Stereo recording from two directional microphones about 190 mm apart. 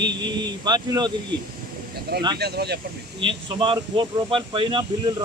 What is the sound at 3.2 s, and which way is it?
Speech, 25° right (ahead or behind).